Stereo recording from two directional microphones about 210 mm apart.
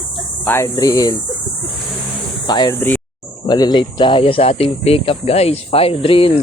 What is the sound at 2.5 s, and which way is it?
Speech, 20° left (ahead or behind).